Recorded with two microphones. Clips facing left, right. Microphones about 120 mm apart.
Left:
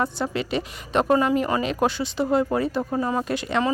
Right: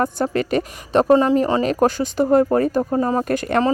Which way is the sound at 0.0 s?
50° right (ahead or behind).